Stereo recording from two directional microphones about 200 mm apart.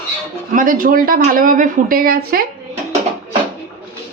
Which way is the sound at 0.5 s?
40° right (ahead or behind).